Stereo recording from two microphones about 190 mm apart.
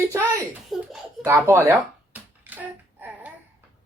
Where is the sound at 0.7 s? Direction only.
Centre (ahead or behind).